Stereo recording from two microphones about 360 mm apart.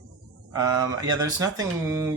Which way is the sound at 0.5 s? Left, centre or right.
Centre.